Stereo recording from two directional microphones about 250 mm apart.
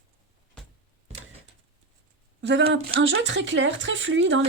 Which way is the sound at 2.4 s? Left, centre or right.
Right.